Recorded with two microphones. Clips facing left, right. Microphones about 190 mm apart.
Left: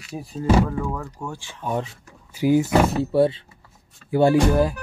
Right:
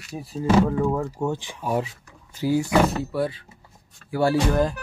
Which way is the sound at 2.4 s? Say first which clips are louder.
Left 2 dB; 20° left (ahead or behind).